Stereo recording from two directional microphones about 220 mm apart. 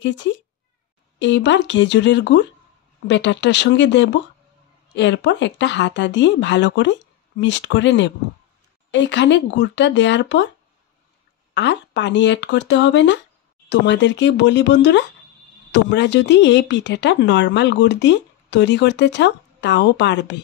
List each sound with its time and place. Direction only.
0.0 s speech: 55° left (ahead or behind)
11.5 s speech: 55° left (ahead or behind)